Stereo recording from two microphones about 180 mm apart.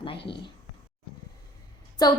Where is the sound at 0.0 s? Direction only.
30° left (ahead or behind).